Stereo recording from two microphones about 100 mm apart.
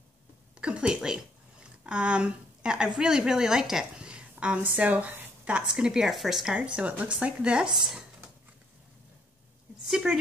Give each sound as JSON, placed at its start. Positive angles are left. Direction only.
{"t": 0.6, "sound": "a woman's voice", "side_deg": -10}
{"t": 9.8, "sound": "a woman's voice", "side_deg": -5}